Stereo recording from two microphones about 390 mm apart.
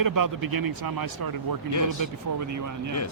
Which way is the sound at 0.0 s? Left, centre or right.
Right.